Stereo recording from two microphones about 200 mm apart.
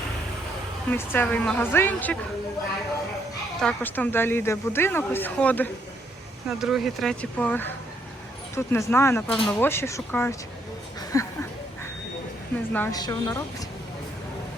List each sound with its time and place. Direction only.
0.9 s speech: 10° left (ahead or behind)
3.6 s speech: 5° left (ahead or behind)
11.1 s a sound: 15° left (ahead or behind)
12.7 s speech: 15° left (ahead or behind)